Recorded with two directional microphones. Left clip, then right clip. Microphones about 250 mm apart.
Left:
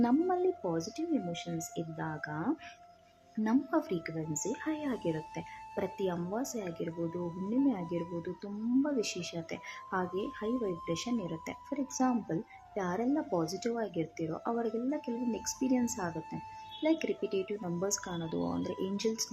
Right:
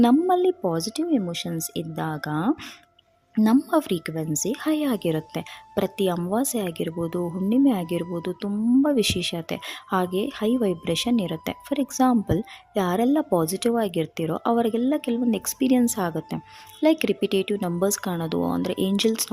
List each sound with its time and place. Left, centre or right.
0.0 s speech: right
8.4 s speech: right